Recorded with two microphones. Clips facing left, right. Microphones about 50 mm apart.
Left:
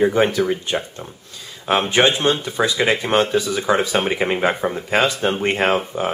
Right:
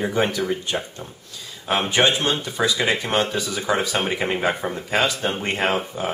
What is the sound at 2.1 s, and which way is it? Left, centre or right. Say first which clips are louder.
Speech: left 3 dB; centre.